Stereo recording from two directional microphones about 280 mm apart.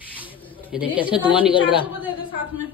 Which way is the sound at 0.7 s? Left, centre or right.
Centre.